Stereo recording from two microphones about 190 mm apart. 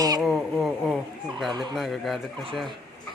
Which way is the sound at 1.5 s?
25° right (ahead or behind).